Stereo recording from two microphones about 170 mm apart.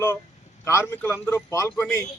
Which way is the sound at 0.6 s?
15° left (ahead or behind).